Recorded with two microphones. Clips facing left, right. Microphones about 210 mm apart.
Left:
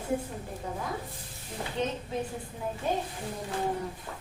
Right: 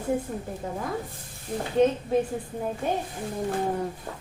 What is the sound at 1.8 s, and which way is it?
Speech, 50° right (ahead or behind).